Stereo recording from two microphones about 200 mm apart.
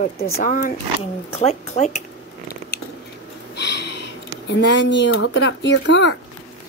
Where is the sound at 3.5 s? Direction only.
55° left (ahead or behind).